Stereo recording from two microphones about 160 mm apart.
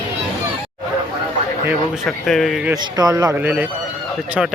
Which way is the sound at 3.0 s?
20° right (ahead or behind).